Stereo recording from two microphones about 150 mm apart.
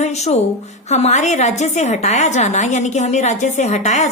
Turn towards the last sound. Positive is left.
turn(degrees=50)  # may be behind; listen again after turning